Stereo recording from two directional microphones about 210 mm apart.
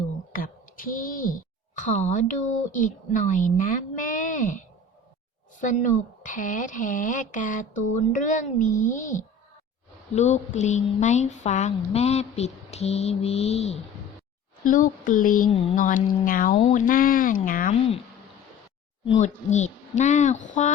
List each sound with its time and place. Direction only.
0.3 s a sound: 40° left (ahead or behind)
2.7 s speech: 35° left (ahead or behind)
19.2 s speech: 35° left (ahead or behind)